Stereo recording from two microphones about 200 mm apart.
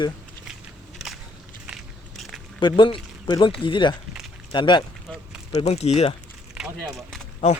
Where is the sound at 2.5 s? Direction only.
25° left (ahead or behind).